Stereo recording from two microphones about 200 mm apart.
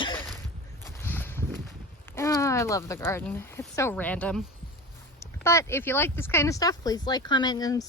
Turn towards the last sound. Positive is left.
turn(degrees=20)  # may be behind; listen again after turning